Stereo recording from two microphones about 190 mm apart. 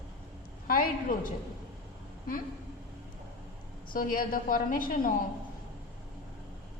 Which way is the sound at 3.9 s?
50° left (ahead or behind).